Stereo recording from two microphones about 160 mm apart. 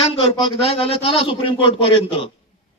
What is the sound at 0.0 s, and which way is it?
A man's voice, 35° left (ahead or behind).